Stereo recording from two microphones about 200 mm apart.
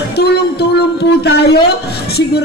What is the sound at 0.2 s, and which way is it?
A woman's voice, 55° left (ahead or behind).